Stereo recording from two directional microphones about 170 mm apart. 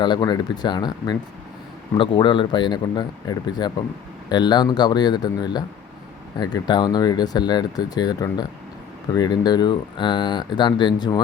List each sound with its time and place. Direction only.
0.0 s speech: 25° left (ahead or behind)